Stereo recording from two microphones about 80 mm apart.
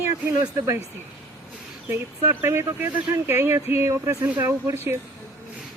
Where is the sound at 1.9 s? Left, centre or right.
Right.